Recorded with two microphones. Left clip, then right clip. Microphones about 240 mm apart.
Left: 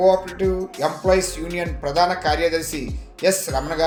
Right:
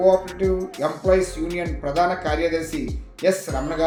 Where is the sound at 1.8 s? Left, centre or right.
Left.